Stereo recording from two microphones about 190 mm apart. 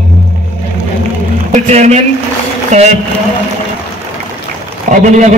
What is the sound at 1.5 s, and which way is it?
A man's voice, 35° right (ahead or behind).